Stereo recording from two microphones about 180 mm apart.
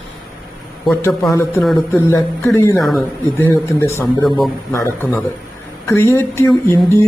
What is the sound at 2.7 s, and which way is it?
Speech, centre (ahead or behind).